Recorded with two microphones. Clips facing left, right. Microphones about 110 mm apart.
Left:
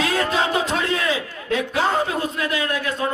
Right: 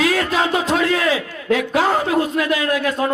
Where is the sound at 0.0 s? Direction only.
30° left (ahead or behind).